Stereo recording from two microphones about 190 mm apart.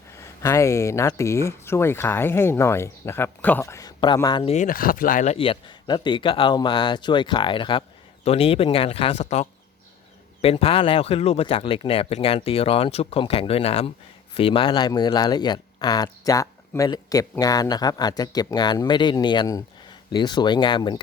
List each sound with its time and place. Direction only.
0.2 s speech: 15° left (ahead or behind)
4.5 s speech: 45° left (ahead or behind); by 21.0 s 25° left (ahead or behind)